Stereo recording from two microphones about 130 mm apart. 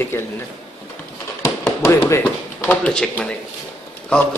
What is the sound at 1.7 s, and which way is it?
Speech, 20° left (ahead or behind).